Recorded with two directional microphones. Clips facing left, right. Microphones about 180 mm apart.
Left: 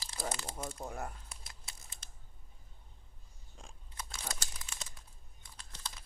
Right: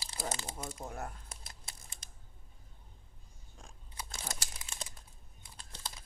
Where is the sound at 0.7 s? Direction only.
5° right (ahead or behind).